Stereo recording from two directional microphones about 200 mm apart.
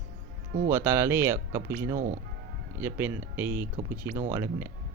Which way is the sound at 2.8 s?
10° right (ahead or behind).